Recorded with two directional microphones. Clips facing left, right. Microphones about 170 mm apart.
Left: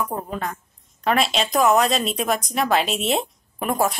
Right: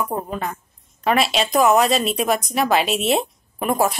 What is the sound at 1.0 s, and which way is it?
A woman's voice, 5° right (ahead or behind).